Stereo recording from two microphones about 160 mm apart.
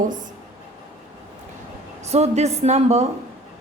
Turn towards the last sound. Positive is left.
turn(degrees=-45)  # may be behind; listen again after turning